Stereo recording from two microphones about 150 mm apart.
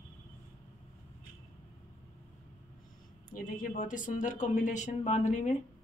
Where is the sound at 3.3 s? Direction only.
65° left (ahead or behind).